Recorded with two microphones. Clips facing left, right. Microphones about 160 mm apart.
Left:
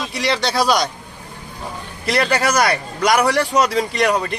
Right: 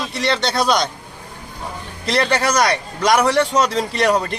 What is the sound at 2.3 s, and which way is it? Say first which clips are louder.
Speech: even; centre (ahead or behind).